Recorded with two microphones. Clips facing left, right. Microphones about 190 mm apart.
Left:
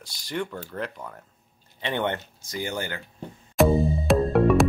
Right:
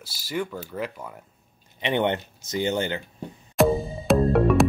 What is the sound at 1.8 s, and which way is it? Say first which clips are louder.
Speech: right 4 dB; 20° right (ahead or behind).